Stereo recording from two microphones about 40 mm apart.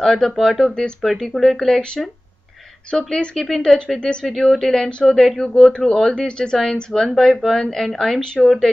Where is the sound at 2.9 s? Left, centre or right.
Centre.